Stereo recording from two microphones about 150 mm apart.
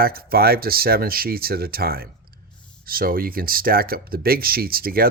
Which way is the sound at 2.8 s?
75° right (ahead or behind).